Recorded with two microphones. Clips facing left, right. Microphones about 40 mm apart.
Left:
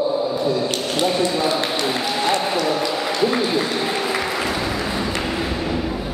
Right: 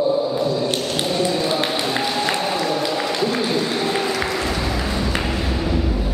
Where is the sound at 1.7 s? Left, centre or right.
Centre.